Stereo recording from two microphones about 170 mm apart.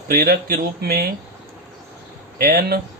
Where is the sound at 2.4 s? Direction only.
60° right (ahead or behind).